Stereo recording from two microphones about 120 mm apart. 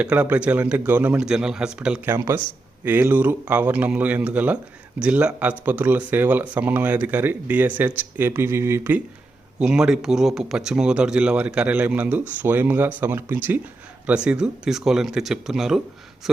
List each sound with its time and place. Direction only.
0.0 s speech: 10° right (ahead or behind)
2.0 s speech: 20° right (ahead or behind)
9.6 s speech: 5° right (ahead or behind)